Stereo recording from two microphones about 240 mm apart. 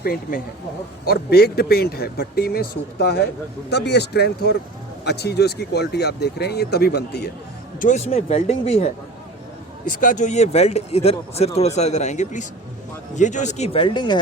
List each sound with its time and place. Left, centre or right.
0.0 s speech: left
7.8 s speech: left